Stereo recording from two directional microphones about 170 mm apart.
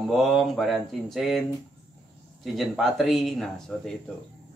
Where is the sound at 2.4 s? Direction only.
Centre (ahead or behind).